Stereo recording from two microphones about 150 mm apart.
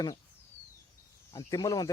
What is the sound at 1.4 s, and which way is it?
Speech, 25° left (ahead or behind).